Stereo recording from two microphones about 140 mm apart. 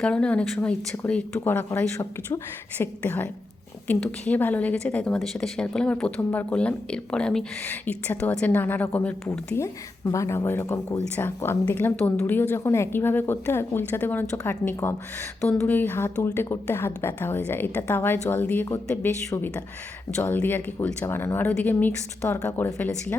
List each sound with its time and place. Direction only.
0.0 s a woman's voice: 10° left (ahead or behind)